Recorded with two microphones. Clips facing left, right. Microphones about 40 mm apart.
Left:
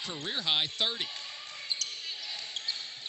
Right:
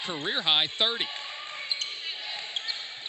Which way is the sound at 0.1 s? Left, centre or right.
Right.